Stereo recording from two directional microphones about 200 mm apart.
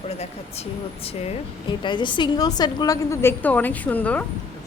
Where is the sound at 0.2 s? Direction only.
30° left (ahead or behind); by 4.3 s 5° left (ahead or behind).